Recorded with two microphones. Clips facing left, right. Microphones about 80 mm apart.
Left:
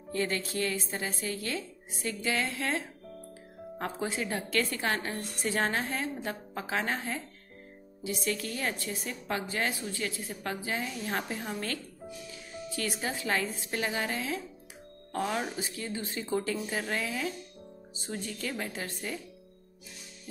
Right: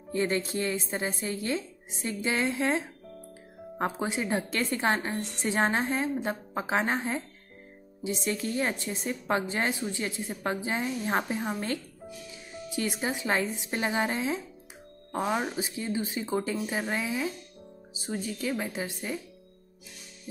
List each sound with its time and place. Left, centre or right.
0.1 s a woman's voice: right
4.0 s a woman's voice: right